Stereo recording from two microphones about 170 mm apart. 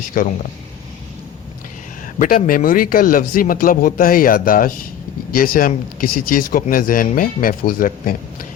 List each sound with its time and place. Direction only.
0.1 s speech: 55° left (ahead or behind)
2.1 s speech: 55° left (ahead or behind)